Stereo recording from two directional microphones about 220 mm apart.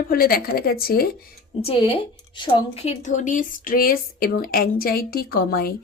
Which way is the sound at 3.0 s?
35° left (ahead or behind).